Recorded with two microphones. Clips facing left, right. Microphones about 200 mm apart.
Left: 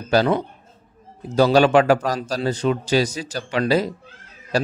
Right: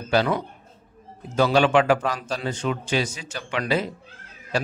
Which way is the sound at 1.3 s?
40° left (ahead or behind).